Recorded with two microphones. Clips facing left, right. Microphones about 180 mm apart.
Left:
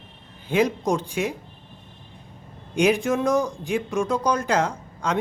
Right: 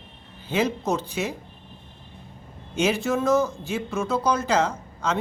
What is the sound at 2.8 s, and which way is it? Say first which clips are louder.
Speech: left 3 dB; 15° left (ahead or behind).